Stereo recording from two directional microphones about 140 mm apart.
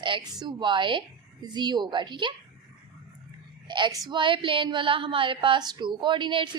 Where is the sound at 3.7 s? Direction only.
30° right (ahead or behind).